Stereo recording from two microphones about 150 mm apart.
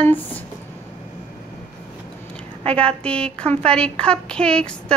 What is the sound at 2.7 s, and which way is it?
A child's voice, 5° left (ahead or behind).